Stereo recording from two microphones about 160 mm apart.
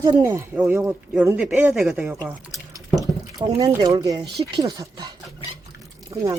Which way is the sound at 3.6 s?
20° right (ahead or behind).